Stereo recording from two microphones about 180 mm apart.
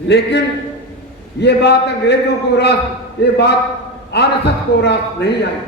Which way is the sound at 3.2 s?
70° left (ahead or behind).